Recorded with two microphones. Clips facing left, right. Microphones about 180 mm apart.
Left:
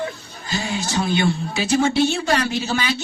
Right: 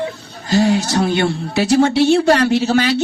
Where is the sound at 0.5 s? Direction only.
75° right (ahead or behind).